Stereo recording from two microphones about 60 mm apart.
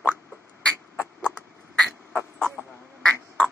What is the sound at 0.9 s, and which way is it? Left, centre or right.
Chicken, centre.